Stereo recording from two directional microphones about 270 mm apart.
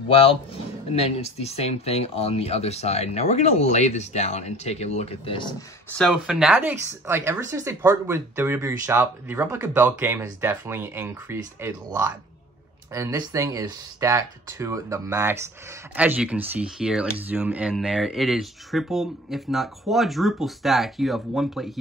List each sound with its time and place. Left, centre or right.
0.1 s speech: left
5.9 s speech: centre